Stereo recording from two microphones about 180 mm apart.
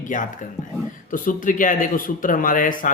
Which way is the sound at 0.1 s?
45° left (ahead or behind).